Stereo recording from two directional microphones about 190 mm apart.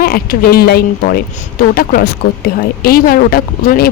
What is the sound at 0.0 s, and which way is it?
Speech, 50° left (ahead or behind).